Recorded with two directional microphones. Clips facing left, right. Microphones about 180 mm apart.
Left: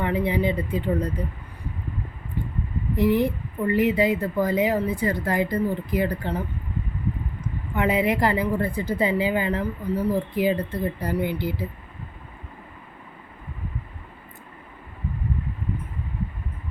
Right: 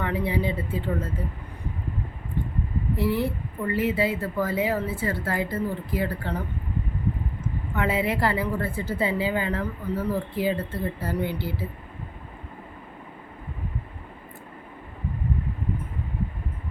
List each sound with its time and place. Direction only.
0.0 s a woman's voice: 20° left (ahead or behind)
2.9 s a woman's voice: 15° left (ahead or behind)
7.4 s a woman's voice: 15° left (ahead or behind)